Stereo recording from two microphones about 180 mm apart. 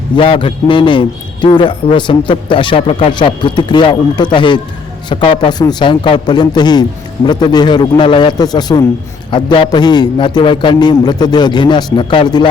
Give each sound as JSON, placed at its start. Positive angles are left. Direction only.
{"t": 0.2, "sound": "a man's voice", "side_deg": 30}